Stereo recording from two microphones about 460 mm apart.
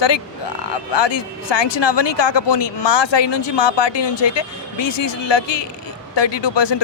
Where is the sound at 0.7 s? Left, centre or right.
Left.